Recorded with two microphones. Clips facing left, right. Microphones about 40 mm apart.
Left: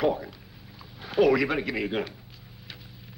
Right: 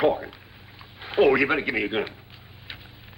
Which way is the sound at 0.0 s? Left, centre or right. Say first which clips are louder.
Right 4 dB; right.